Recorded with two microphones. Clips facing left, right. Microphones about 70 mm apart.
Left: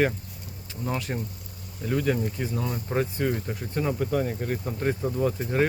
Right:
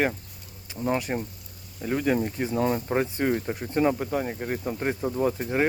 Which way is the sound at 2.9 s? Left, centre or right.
Right.